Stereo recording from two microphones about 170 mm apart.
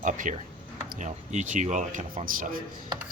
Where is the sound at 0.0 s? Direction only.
50° right (ahead or behind).